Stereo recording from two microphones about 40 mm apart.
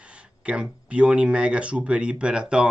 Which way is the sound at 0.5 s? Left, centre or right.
Right.